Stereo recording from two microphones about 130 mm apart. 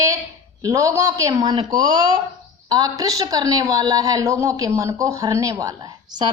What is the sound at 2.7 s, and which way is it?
A woman's voice, 30° right (ahead or behind).